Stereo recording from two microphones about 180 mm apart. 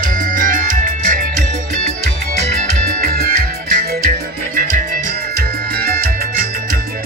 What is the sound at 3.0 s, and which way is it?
Music, 60° right (ahead or behind).